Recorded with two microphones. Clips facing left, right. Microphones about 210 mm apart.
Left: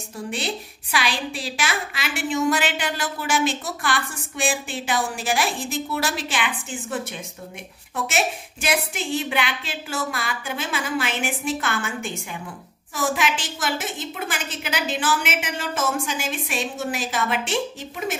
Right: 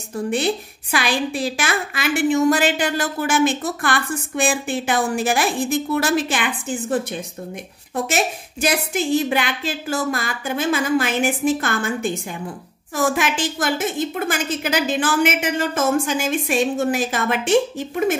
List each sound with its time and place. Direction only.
0.1 s a woman's voice: 50° right (ahead or behind)
12.9 s a woman's voice: 50° right (ahead or behind)